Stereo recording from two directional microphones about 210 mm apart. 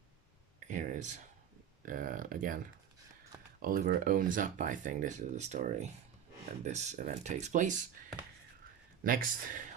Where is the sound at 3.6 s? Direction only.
40° right (ahead or behind).